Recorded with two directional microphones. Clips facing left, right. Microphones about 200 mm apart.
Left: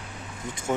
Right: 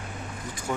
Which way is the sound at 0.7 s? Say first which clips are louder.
Left 4 dB; 20° left (ahead or behind).